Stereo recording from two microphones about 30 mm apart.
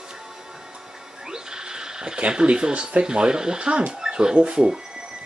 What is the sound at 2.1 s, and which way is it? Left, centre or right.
Speech, right.